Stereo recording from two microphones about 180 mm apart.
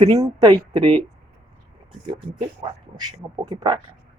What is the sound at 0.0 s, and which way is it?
Speech, 20° right (ahead or behind).